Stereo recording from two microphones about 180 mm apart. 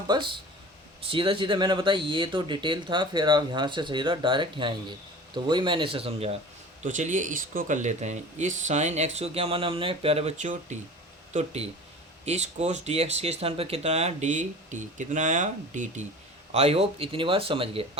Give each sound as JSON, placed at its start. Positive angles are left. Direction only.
{"t": 0.1, "sound": "speech", "side_deg": -25}
{"t": 6.8, "sound": "speech", "side_deg": -45}
{"t": 16.5, "sound": "speech", "side_deg": -35}